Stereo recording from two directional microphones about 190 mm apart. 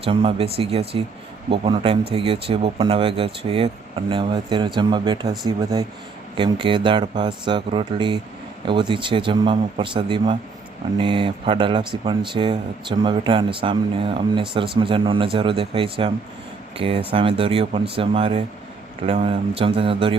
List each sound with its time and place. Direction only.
0.0 s speech: 30° right (ahead or behind)